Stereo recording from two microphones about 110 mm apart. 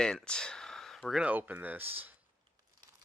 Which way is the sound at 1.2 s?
15° right (ahead or behind).